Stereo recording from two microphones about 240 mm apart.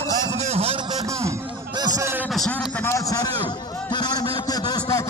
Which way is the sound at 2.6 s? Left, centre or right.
Centre.